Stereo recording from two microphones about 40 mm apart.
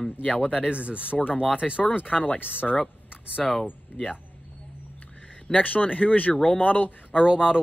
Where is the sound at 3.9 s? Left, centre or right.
Left.